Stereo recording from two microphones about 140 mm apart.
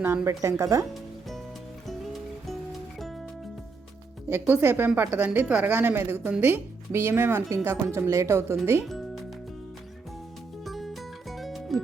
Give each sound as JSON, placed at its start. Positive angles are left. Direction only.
{"t": 0.3, "sound": "speech", "side_deg": -20}
{"t": 4.3, "sound": "speech", "side_deg": -15}
{"t": 8.9, "sound": "music", "side_deg": 0}
{"t": 10.6, "sound": "music", "side_deg": 0}